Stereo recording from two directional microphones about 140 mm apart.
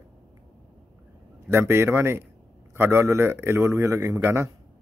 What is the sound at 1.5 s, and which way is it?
A man's voice, 20° right (ahead or behind).